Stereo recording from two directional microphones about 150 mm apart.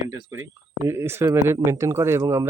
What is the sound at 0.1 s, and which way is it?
Speech, 20° right (ahead or behind).